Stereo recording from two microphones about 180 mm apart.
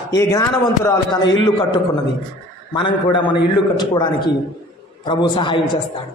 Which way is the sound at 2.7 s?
25° left (ahead or behind).